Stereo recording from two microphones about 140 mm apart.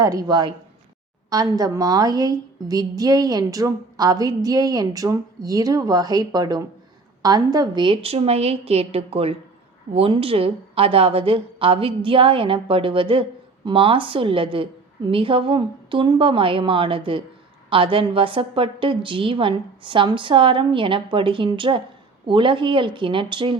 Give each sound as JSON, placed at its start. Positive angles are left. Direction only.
{"t": 0.0, "sound": "a woman's voice", "side_deg": -25}